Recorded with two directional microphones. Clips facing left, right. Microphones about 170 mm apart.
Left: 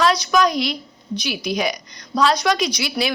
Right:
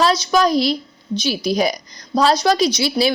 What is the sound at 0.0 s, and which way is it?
A woman's voice, 30° right (ahead or behind).